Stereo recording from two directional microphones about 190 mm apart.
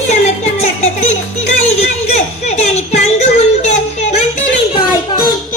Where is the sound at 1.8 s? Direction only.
35° left (ahead or behind).